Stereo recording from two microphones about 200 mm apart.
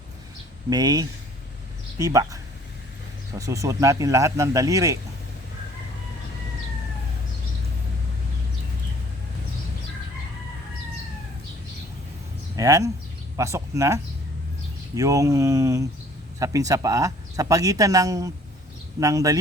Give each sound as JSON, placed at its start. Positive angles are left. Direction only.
{"t": 0.7, "sound": "speech", "side_deg": -20}
{"t": 12.5, "sound": "speech", "side_deg": -15}